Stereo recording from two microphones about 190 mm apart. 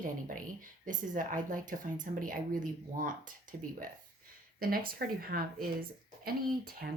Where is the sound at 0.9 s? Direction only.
45° right (ahead or behind).